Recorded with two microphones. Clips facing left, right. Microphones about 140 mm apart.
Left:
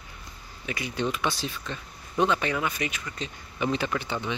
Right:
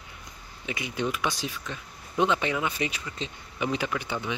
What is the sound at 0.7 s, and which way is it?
Speech, 20° right (ahead or behind).